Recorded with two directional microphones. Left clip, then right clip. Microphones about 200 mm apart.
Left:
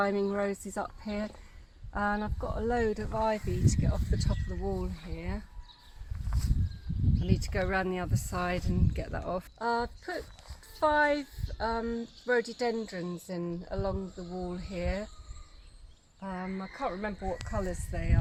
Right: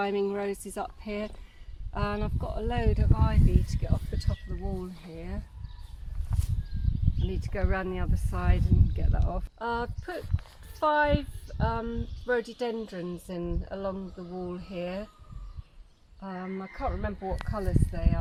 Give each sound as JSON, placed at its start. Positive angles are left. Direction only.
{"t": 0.0, "sound": "speech", "side_deg": 15}
{"t": 7.3, "sound": "speech", "side_deg": 55}
{"t": 9.6, "sound": "speech", "side_deg": 5}
{"t": 16.2, "sound": "speech", "side_deg": 25}